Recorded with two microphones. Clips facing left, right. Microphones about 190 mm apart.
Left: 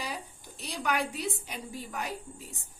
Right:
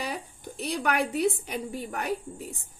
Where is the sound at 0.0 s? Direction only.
60° right (ahead or behind).